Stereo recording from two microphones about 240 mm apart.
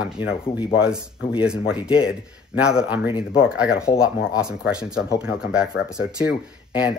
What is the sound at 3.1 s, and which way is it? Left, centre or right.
Speech, left.